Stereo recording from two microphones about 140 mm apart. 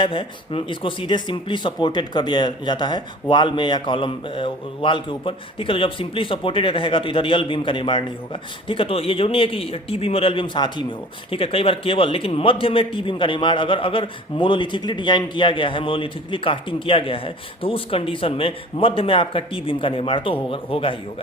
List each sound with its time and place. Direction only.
0.0 s speech: 40° left (ahead or behind)